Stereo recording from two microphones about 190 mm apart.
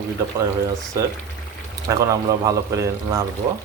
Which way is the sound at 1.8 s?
20° right (ahead or behind).